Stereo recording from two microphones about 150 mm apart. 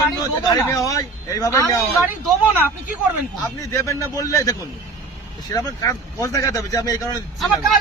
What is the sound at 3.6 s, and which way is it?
Speech, 20° left (ahead or behind).